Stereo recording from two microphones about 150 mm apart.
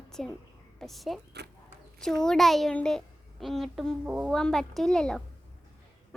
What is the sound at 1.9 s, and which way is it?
A woman's voice, 5° left (ahead or behind).